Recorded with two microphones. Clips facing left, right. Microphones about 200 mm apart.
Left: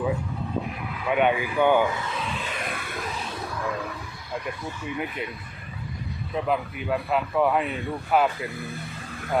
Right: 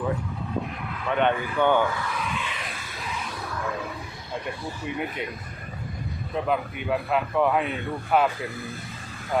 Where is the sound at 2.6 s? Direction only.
60° left (ahead or behind).